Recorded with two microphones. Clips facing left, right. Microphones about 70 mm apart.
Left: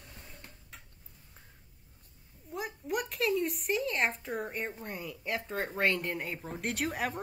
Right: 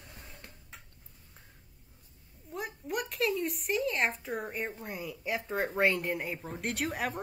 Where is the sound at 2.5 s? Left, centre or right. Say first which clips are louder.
Left 1 dB; centre.